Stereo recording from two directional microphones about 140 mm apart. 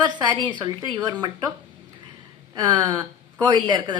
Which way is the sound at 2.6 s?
30° right (ahead or behind).